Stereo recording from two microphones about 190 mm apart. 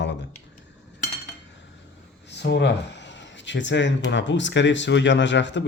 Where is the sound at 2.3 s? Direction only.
65° left (ahead or behind).